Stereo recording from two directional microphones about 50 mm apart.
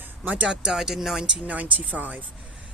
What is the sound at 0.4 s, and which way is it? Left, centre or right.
Speech, centre.